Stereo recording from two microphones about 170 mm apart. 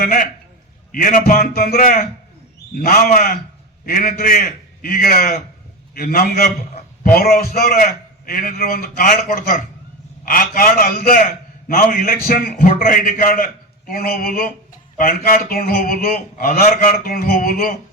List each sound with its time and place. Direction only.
0.0 s a man's voice: 55° left (ahead or behind)